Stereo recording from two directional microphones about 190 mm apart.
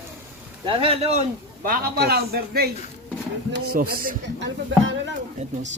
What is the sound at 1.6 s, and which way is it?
A man's voice, 50° right (ahead or behind).